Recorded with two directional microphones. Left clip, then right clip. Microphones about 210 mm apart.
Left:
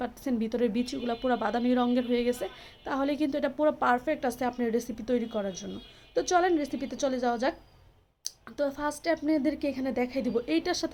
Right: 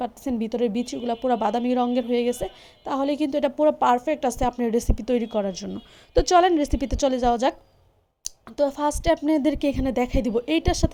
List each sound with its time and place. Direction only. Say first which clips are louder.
0.0 s a woman's voice: right 4 dB; 25° right (ahead or behind)